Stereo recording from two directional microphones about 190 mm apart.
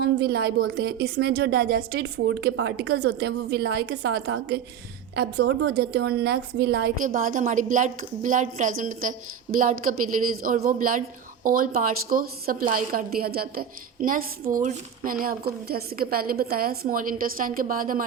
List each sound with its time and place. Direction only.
0.0 s a woman's voice: 60° right (ahead or behind)